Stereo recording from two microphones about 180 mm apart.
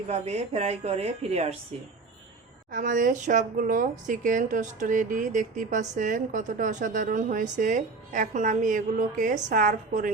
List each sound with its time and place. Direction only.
0.1 s a woman's voice: 35° right (ahead or behind)
2.7 s speech: 50° right (ahead or behind)